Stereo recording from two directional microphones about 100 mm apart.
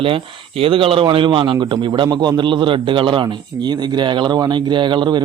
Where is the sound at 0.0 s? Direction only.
65° right (ahead or behind).